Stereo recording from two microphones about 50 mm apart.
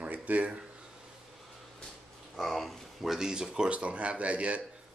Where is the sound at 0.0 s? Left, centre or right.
Right.